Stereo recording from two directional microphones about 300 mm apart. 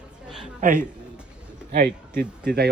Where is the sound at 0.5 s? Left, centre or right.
Right.